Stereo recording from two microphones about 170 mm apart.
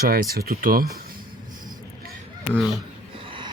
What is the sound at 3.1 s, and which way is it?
Train, 30° right (ahead or behind).